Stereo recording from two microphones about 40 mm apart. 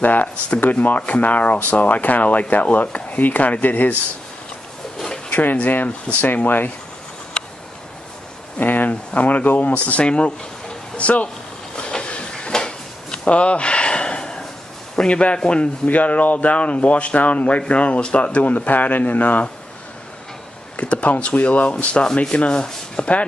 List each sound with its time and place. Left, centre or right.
0.0 s speech: left
0.5 s rub: left
5.3 s speech: left
8.5 s speech: left
11.0 s rub: left
11.7 s drawer open or close: left
15.0 s sanding: left
15.9 s rub: left
20.7 s rub: left
22.0 s sanding: centre